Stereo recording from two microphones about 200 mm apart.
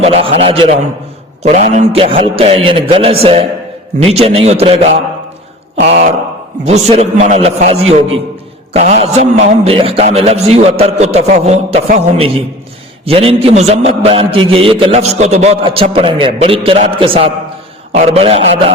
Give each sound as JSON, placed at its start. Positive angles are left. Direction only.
{"t": 0.0, "sound": "a man's voice", "side_deg": -30}
{"t": 6.7, "sound": "a man's voice", "side_deg": -30}